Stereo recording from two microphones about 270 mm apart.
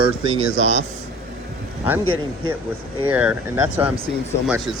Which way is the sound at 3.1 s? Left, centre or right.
Centre.